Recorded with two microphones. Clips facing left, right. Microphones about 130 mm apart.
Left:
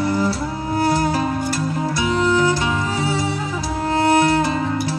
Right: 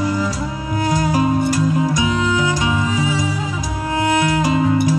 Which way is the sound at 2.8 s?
60° left (ahead or behind).